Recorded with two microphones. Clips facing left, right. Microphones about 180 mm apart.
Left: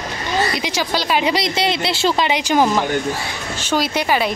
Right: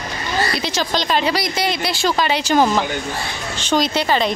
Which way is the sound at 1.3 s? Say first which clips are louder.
Left 2 dB; 25° left (ahead or behind).